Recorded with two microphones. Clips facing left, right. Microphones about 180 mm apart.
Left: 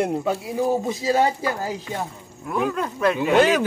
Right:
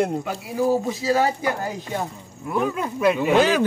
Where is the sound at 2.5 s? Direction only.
5° right (ahead or behind).